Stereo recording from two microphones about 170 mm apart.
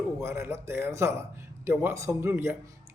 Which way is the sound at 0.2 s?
15° right (ahead or behind).